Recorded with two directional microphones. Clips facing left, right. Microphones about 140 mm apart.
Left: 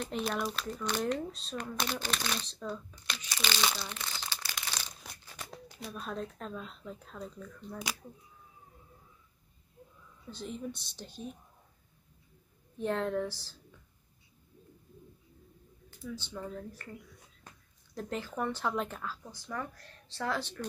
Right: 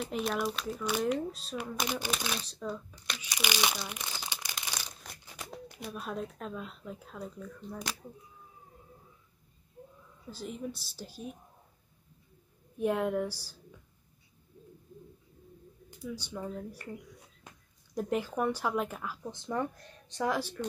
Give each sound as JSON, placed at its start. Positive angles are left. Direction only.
{"t": 0.0, "sound": "speech", "side_deg": 0}
{"t": 10.3, "sound": "a woman's voice", "side_deg": -5}
{"t": 12.7, "sound": "speech", "side_deg": -10}
{"t": 16.0, "sound": "speech", "side_deg": -10}
{"t": 19.3, "sound": "speech", "side_deg": -25}